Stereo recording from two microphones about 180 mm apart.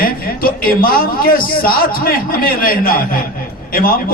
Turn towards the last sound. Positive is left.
turn(degrees=55)  # may be behind; listen again after turning